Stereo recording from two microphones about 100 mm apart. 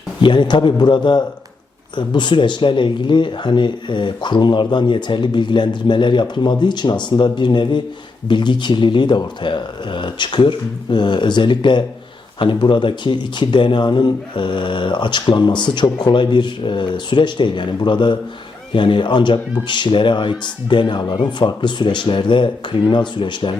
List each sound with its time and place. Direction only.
0.2 s speech: 55° left (ahead or behind)